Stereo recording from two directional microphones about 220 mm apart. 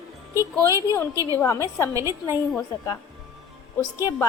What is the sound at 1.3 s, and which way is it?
Speech, 15° left (ahead or behind).